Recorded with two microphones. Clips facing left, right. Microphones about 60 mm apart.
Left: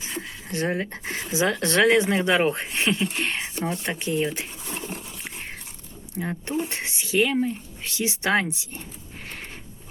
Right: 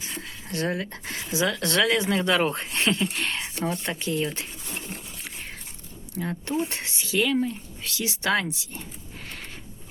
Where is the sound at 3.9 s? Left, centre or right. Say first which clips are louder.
Left 2 dB; left.